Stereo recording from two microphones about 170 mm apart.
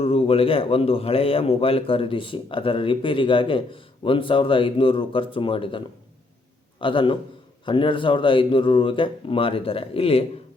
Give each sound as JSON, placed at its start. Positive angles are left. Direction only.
{"t": 0.0, "sound": "a man's voice", "side_deg": 35}